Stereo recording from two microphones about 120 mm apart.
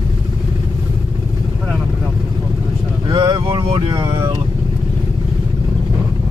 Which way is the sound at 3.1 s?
40° right (ahead or behind).